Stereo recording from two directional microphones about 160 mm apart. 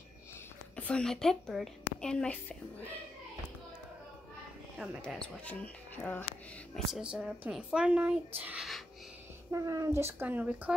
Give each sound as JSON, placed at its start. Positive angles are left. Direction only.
{"t": 0.7, "sound": "a woman's voice", "side_deg": 5}
{"t": 5.0, "sound": "speech", "side_deg": 5}
{"t": 6.7, "sound": "speech", "side_deg": -5}
{"t": 9.5, "sound": "speech", "side_deg": -20}